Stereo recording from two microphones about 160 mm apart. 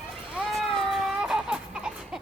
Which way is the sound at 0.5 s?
5° right (ahead or behind).